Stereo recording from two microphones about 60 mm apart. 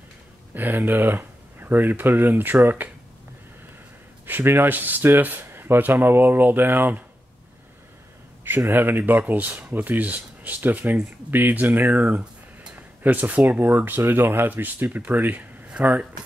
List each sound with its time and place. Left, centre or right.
0.6 s speech: right
4.3 s speech: right
8.5 s speech: right